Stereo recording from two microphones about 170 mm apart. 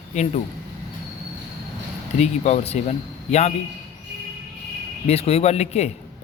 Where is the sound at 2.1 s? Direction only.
40° left (ahead or behind).